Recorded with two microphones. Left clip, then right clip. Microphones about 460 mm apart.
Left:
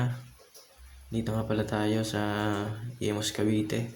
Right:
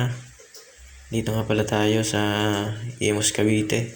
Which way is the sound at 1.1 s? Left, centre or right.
Right.